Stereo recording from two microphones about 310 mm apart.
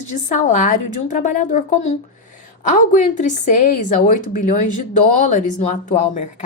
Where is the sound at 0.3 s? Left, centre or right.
Left.